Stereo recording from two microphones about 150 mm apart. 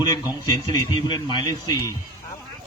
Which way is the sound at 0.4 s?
30° left (ahead or behind).